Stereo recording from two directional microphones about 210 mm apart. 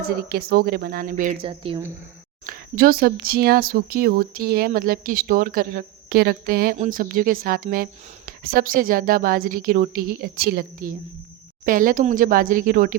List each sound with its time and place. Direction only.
0.2 s speech: 45° right (ahead or behind)
1.4 s speech: 25° right (ahead or behind)
2.5 s speech: 45° right (ahead or behind)